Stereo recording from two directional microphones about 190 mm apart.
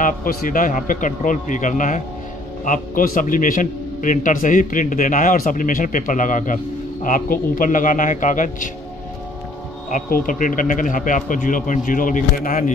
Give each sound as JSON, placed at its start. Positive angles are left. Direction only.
{"t": 0.0, "sound": "a man's voice", "side_deg": 50}
{"t": 9.8, "sound": "a man's voice", "side_deg": 45}